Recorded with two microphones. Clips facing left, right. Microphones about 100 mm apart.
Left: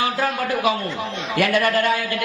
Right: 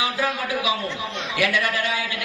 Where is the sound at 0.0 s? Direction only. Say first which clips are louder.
Left 3 dB; 50° left (ahead or behind).